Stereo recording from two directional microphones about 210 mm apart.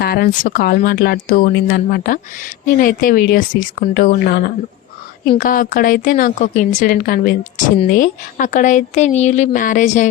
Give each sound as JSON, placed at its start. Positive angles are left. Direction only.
{"t": 0.0, "sound": "speech", "side_deg": 45}
{"t": 5.4, "sound": "speech", "side_deg": 40}